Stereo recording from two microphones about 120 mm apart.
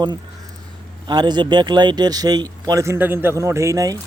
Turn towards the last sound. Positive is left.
turn(degrees=-30)  # may be behind; listen again after turning